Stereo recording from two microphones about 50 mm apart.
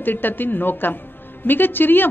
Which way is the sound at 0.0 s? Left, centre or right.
Left.